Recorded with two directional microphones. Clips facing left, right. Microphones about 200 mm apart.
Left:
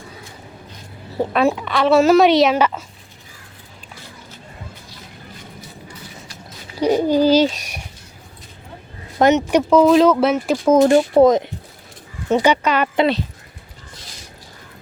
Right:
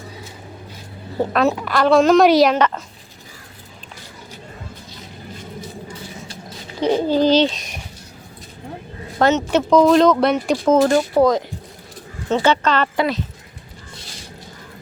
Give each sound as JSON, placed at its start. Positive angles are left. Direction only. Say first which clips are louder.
{"t": 1.1, "sound": "a woman's voice", "louder": "even", "side_deg": 0}
{"t": 6.7, "sound": "a child's voice", "louder": "left 1 dB", "side_deg": 10}
{"t": 9.1, "sound": "a woman's voice", "louder": "left 2 dB", "side_deg": 15}
{"t": 10.8, "sound": "a child's voice", "louder": "left 5 dB", "side_deg": 20}